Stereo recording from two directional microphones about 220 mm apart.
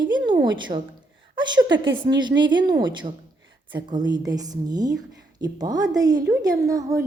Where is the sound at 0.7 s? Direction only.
30° right (ahead or behind).